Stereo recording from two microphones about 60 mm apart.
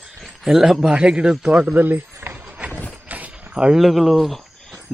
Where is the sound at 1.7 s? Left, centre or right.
Right.